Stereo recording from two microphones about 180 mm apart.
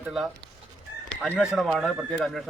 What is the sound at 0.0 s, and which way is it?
A man's voice, 5° right (ahead or behind).